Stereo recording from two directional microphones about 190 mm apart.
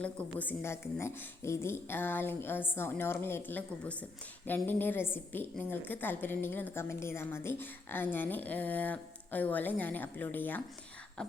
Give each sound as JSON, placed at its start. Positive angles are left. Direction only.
{"t": 0.0, "sound": "a woman's voice", "side_deg": 5}
{"t": 11.2, "sound": "beatboxing", "side_deg": 5}